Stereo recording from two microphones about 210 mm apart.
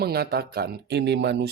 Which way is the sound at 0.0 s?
50° right (ahead or behind).